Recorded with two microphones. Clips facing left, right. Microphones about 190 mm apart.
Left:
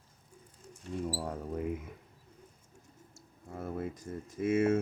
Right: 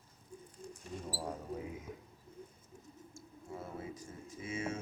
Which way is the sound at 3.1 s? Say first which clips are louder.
Left 1 dB; 60° left (ahead or behind).